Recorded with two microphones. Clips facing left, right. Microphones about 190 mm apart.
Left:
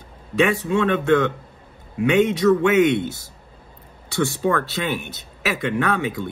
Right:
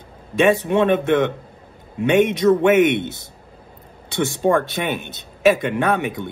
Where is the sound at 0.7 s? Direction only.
20° right (ahead or behind).